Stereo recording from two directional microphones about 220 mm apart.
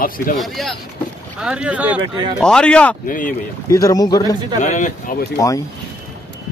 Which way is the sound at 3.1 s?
40° left (ahead or behind).